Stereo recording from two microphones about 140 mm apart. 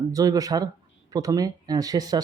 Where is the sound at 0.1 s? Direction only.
25° right (ahead or behind).